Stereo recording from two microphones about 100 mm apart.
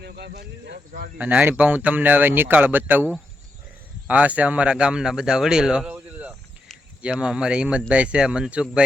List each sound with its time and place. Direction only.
1.2 s speech: 15° right (ahead or behind)